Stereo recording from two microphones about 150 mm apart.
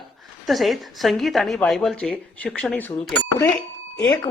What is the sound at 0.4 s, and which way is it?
Speech, centre (ahead or behind).